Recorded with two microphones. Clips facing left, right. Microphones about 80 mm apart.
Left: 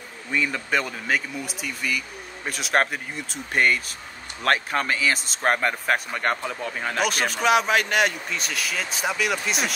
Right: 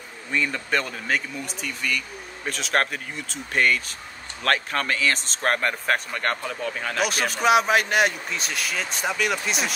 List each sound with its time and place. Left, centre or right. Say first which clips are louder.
0.3 s speech: even; centre
7.0 s a man's voice: even; centre